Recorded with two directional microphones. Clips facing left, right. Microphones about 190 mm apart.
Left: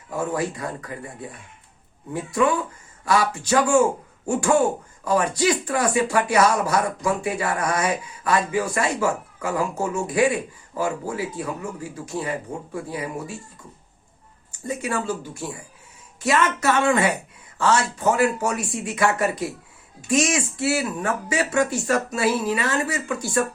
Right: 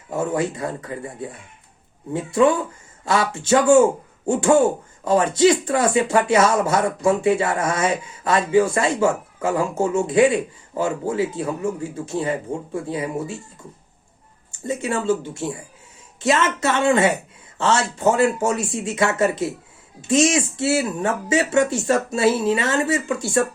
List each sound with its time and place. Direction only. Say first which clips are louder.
0.1 s speech: right 3 dB; 25° right (ahead or behind)
14.5 s speech: right 3 dB; 25° right (ahead or behind)